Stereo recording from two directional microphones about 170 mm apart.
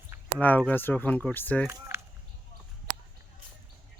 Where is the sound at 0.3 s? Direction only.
10° left (ahead or behind).